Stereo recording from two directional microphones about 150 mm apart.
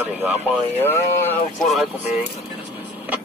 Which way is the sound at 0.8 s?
15° left (ahead or behind).